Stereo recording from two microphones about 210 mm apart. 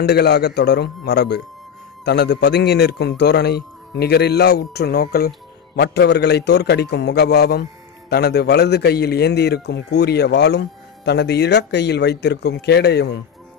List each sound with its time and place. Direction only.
0.0 s speech: 50° left (ahead or behind)